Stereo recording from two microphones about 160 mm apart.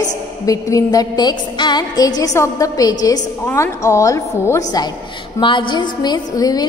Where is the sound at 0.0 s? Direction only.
20° left (ahead or behind).